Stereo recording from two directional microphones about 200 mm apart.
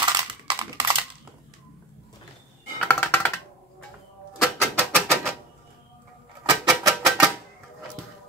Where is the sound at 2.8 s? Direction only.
10° left (ahead or behind).